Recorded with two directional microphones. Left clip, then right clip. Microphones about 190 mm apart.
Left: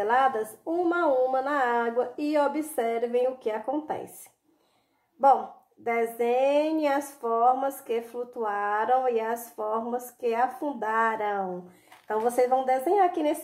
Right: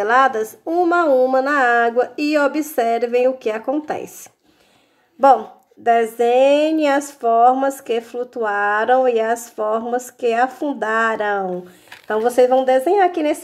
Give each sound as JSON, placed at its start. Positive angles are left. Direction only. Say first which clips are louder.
{"t": 0.0, "sound": "speech", "louder": "right 8 dB", "side_deg": -30}
{"t": 5.9, "sound": "speech", "louder": "right 11 dB", "side_deg": -30}